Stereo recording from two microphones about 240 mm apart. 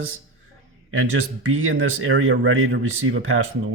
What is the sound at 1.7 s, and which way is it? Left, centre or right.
Speech, right.